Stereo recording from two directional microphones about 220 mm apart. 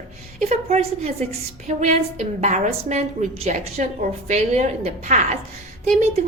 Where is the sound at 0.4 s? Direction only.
30° right (ahead or behind).